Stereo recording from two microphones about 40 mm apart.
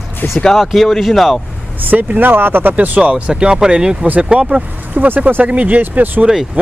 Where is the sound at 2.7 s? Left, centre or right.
Right.